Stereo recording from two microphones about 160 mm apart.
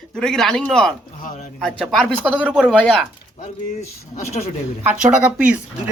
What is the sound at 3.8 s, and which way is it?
Speech, 45° left (ahead or behind).